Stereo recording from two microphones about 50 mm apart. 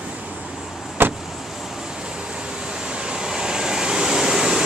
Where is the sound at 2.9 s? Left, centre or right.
Centre.